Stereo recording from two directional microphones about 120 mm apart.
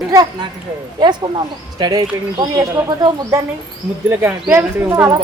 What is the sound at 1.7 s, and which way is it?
Speech, 35° right (ahead or behind).